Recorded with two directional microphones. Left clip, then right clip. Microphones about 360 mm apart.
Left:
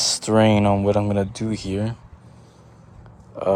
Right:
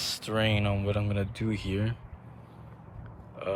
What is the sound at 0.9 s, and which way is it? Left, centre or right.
Speech, centre.